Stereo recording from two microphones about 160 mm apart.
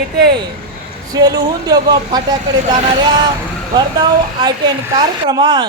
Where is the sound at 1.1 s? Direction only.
25° right (ahead or behind).